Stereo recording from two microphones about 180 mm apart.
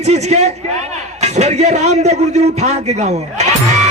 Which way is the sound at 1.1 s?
40° right (ahead or behind).